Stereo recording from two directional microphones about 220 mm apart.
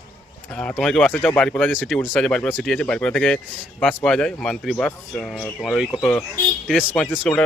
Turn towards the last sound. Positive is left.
turn(degrees=5)  # may be behind; listen again after turning